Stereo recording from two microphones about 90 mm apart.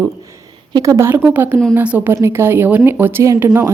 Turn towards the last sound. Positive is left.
turn(degrees=-25)  # may be behind; listen again after turning